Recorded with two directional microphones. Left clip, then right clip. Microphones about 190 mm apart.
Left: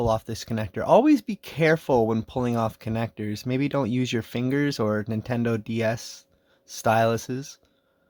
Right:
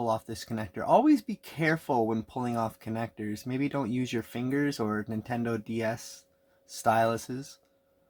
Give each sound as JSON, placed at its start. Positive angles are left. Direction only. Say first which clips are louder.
{"t": 0.0, "sound": "speech", "louder": "left 5 dB", "side_deg": 45}